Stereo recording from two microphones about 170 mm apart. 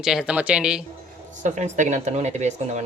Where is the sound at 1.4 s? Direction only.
45° right (ahead or behind).